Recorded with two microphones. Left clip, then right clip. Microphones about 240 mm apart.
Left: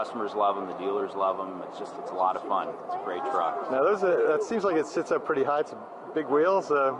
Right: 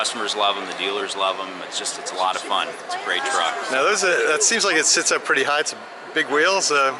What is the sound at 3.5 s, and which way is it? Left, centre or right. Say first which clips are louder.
Speech: right 5 dB; centre.